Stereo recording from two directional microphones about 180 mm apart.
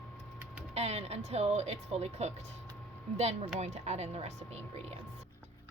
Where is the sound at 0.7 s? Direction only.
35° right (ahead or behind).